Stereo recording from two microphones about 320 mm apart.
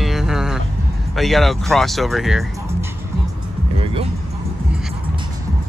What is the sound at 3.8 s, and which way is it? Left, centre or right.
Music, centre.